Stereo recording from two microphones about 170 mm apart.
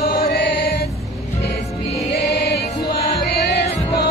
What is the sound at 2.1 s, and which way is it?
Music, 75° left (ahead or behind).